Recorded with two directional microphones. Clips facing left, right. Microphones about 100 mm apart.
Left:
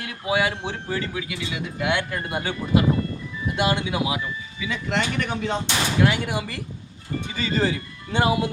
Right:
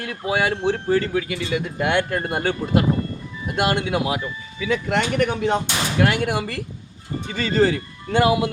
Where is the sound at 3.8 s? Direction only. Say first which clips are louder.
Right 3 dB; 60° right (ahead or behind).